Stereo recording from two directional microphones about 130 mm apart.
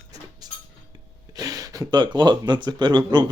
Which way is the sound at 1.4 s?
25° right (ahead or behind).